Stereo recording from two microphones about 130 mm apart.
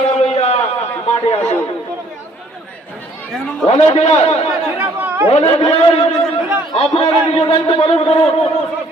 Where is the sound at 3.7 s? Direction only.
55° left (ahead or behind).